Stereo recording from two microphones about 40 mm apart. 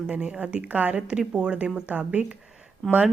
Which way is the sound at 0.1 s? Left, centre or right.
Right.